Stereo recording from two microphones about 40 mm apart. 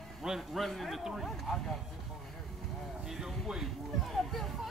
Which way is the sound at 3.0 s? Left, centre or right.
Centre.